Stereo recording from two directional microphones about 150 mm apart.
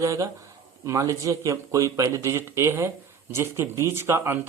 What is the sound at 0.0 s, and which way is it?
Speech, 20° right (ahead or behind).